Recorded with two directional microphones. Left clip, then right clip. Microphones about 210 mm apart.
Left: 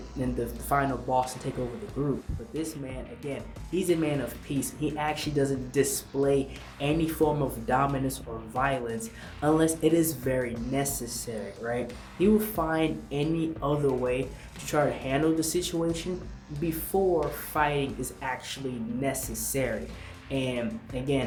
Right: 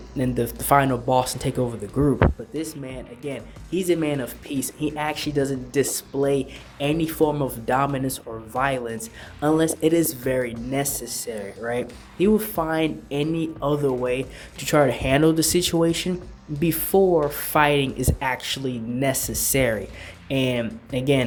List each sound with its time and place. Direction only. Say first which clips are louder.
0.7 s speech: right 8 dB; 45° right (ahead or behind)
2.6 s speech: right 4 dB; 45° right (ahead or behind)